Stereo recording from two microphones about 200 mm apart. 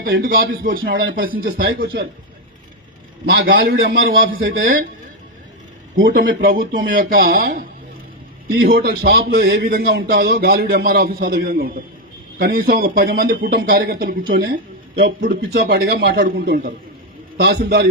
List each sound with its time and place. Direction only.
0.0 s speech: 45° right (ahead or behind)
3.2 s speech: 50° right (ahead or behind)
4.3 s speech: 75° right (ahead or behind)
6.1 s speech: 45° right (ahead or behind)